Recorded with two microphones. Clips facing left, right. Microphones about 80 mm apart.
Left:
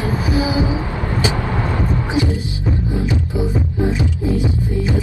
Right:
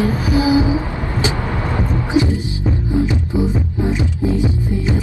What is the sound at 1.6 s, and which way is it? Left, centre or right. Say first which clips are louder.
Music: even; right.